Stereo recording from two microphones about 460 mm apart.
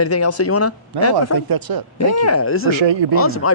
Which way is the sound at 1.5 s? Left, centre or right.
Right.